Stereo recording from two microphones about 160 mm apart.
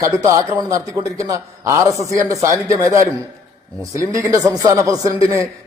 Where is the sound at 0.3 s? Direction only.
20° right (ahead or behind).